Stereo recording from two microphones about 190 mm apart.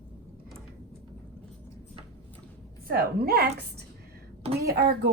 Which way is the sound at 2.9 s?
55° right (ahead or behind).